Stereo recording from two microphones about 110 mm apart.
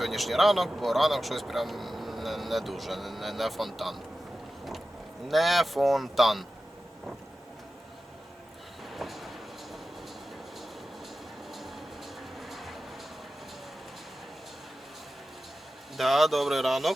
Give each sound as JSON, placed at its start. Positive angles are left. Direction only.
{"t": 0.0, "sound": "speech", "side_deg": 0}
{"t": 5.3, "sound": "speech", "side_deg": 0}
{"t": 8.9, "sound": "train", "side_deg": 0}
{"t": 12.4, "sound": "vehicle", "side_deg": 0}
{"t": 16.0, "sound": "speech", "side_deg": 0}